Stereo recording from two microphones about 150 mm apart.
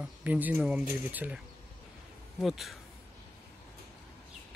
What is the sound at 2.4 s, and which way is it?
Speech, centre (ahead or behind).